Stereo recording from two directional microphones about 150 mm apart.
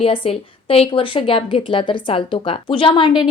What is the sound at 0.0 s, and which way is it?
A woman's voice, 40° left (ahead or behind).